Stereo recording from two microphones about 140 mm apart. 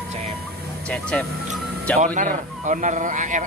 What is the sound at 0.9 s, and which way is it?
Speech, 10° left (ahead or behind).